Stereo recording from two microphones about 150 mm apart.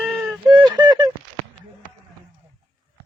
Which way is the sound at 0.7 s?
25° right (ahead or behind).